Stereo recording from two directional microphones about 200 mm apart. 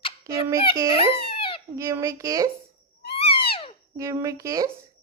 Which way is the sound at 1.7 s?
15° right (ahead or behind).